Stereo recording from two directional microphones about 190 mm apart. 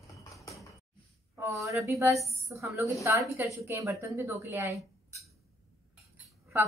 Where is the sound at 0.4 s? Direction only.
15° left (ahead or behind).